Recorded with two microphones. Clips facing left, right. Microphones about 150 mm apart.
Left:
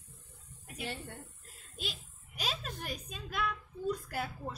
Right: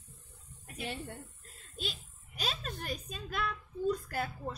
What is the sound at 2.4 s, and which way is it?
A woman's voice, centre (ahead or behind).